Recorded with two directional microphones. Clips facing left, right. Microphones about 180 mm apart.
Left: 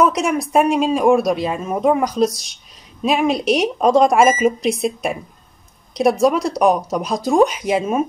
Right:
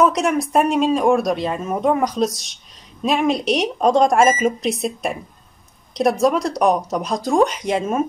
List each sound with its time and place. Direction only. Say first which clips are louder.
0.0 s speech: even; centre (ahead or behind)